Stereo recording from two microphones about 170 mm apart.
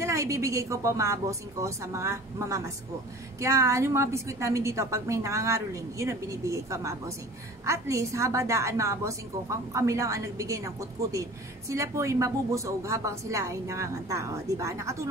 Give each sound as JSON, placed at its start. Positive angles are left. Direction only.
{"t": 0.0, "sound": "a woman's voice", "side_deg": -15}